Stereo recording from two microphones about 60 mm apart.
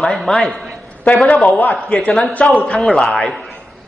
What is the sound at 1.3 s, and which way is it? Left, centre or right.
Speech, centre.